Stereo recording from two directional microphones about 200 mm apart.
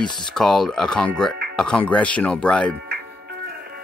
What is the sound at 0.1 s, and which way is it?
Speech, 5° left (ahead or behind).